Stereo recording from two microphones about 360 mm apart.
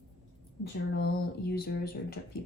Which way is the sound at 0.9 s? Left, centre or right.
Left.